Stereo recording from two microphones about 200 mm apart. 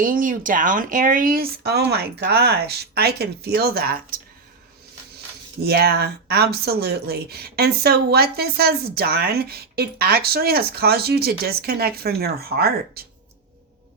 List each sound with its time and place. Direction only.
0.0 s speech: 45° right (ahead or behind)
5.6 s speech: 50° right (ahead or behind)